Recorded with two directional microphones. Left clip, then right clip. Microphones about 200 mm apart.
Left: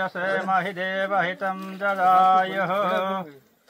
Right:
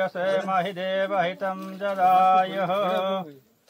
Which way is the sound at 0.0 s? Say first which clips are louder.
Right 1 dB; 35° right (ahead or behind).